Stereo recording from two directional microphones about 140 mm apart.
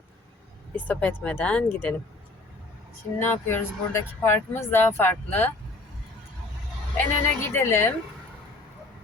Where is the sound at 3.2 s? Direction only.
15° left (ahead or behind).